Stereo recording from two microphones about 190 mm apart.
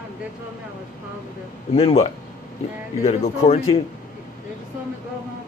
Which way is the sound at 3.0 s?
35° left (ahead or behind).